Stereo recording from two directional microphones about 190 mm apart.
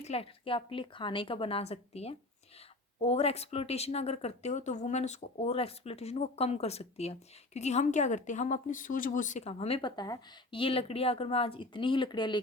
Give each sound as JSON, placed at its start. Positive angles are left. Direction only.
{"t": 0.0, "sound": "a woman's voice", "side_deg": 30}